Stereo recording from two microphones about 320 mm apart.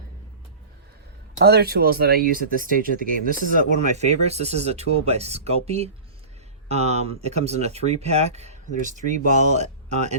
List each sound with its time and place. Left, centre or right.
1.5 s speech: right